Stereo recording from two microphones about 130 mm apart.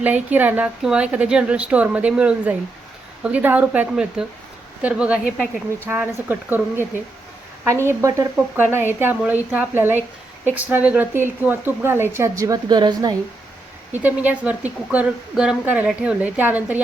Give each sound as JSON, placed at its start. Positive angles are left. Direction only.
{"t": 0.0, "sound": "a woman's voice", "side_deg": -10}
{"t": 5.8, "sound": "a woman's voice", "side_deg": -15}
{"t": 12.6, "sound": "a woman's voice", "side_deg": -35}
{"t": 13.9, "sound": "a woman's voice", "side_deg": -15}